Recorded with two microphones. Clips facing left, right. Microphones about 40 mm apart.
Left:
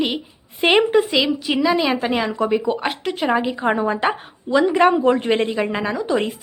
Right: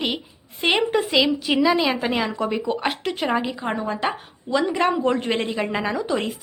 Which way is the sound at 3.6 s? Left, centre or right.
Left.